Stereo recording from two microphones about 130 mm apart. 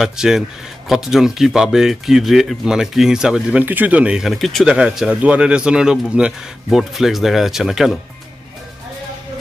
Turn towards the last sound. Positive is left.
turn(degrees=0)  # may be behind; listen again after turning